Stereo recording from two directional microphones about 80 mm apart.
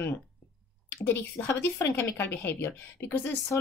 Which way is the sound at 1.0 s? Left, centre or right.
Left.